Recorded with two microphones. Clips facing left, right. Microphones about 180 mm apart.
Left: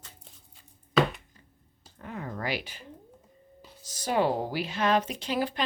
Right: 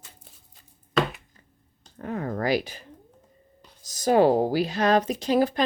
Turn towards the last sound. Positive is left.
turn(degrees=-40)  # may be behind; listen again after turning